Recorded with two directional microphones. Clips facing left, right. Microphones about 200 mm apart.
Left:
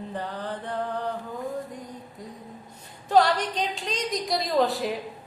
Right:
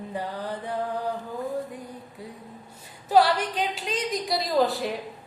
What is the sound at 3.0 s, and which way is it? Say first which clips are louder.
A woman's voice: even; 5° right (ahead or behind).